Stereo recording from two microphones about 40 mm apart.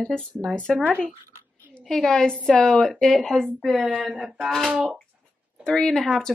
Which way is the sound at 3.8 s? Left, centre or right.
Centre.